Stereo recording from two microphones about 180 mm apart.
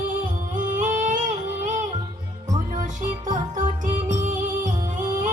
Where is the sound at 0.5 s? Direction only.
45° right (ahead or behind).